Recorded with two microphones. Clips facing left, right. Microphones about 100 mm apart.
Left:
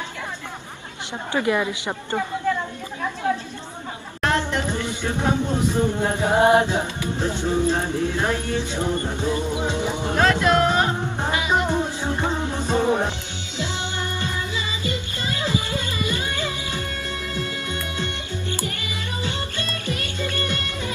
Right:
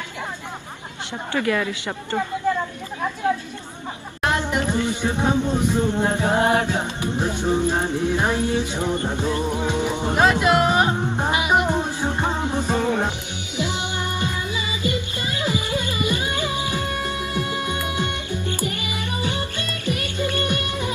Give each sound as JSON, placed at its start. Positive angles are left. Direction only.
{"t": 1.3, "sound": "a woman's voice", "side_deg": 20}
{"t": 2.4, "sound": "a sound", "side_deg": -15}
{"t": 4.2, "sound": "music", "side_deg": -15}
{"t": 5.7, "sound": "speech", "side_deg": -20}
{"t": 6.1, "sound": "a woman's voice", "side_deg": 20}
{"t": 6.8, "sound": "music", "side_deg": -20}
{"t": 12.7, "sound": "music", "side_deg": 20}
{"t": 13.6, "sound": "music", "side_deg": -15}